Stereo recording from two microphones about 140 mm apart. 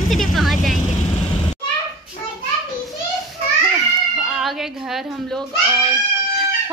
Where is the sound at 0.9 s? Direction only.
45° left (ahead or behind).